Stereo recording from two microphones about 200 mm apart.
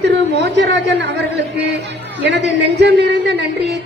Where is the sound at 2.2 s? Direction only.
60° right (ahead or behind).